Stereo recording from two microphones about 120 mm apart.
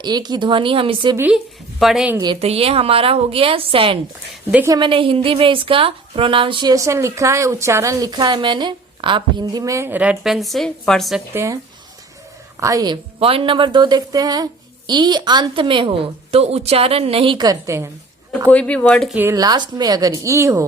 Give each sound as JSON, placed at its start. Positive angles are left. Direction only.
{"t": 0.0, "sound": "speech", "side_deg": -35}
{"t": 1.8, "sound": "a woman's voice", "side_deg": 0}
{"t": 2.4, "sound": "a woman's voice", "side_deg": -55}
{"t": 6.7, "sound": "a woman's voice", "side_deg": -25}
{"t": 12.5, "sound": "a woman's voice", "side_deg": -30}
{"t": 13.1, "sound": "speech", "side_deg": -50}
{"t": 16.4, "sound": "speech", "side_deg": -60}
{"t": 17.3, "sound": "a woman's voice", "side_deg": -30}
{"t": 18.5, "sound": "speech", "side_deg": 10}
{"t": 19.1, "sound": "speech", "side_deg": -15}
{"t": 19.4, "sound": "speech", "side_deg": -35}